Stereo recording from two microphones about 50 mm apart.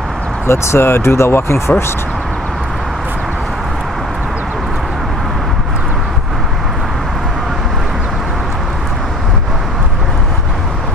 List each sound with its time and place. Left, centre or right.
0.5 s speech: left